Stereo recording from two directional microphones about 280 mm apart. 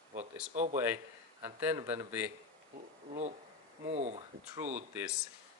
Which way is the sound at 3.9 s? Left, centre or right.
Right.